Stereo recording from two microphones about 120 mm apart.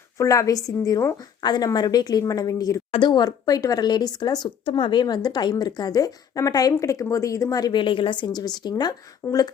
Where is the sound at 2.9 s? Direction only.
40° left (ahead or behind).